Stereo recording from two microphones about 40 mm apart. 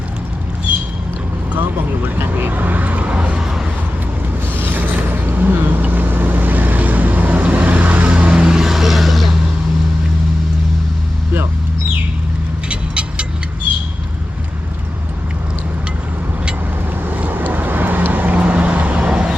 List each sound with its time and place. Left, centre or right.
2.1 s speech: right
3.2 s vehicle: right
4.5 s vehicle: right
8.3 s vehicle: right; by 9.3 s centre
12.6 s vehicle: right
17.0 s vehicle: right